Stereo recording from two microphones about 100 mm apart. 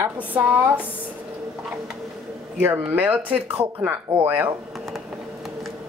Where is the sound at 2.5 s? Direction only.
15° right (ahead or behind).